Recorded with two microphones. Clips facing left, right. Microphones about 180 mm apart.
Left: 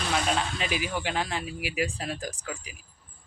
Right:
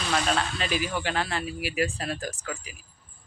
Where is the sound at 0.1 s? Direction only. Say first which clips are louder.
Right 2 dB; 15° left (ahead or behind).